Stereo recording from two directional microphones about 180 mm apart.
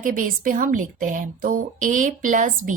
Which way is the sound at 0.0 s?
45° right (ahead or behind).